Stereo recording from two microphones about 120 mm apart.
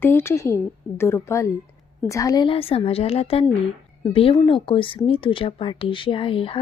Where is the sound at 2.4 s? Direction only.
50° left (ahead or behind).